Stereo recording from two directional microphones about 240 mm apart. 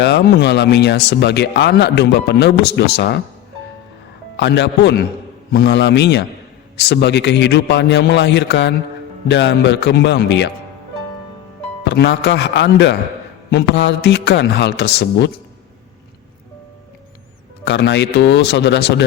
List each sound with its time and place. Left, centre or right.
0.0 s speech: left
4.4 s speech: left
11.9 s speech: left
17.7 s speech: left